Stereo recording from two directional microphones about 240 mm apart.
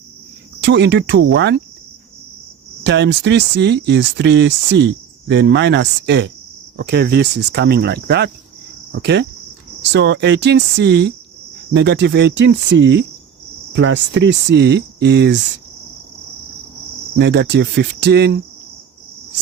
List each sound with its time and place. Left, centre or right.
0.6 s speech: right
2.8 s speech: right
17.2 s speech: right